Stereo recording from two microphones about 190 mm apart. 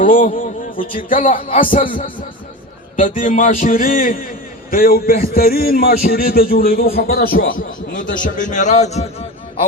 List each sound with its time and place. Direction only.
0.0 s a man's voice: 45° left (ahead or behind)
2.9 s a man's voice: 45° left (ahead or behind)